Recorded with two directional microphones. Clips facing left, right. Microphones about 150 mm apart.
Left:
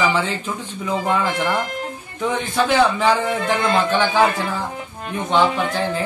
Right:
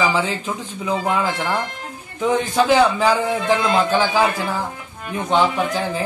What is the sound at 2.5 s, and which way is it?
Speech, 10° right (ahead or behind).